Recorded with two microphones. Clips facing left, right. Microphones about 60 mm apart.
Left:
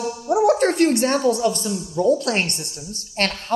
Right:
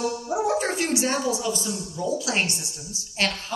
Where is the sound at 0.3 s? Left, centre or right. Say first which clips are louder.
Left 9 dB; left.